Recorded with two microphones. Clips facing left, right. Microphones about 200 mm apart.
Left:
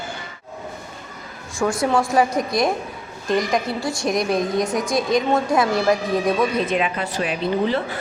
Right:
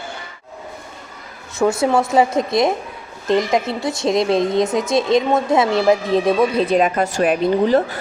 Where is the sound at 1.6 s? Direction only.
20° right (ahead or behind).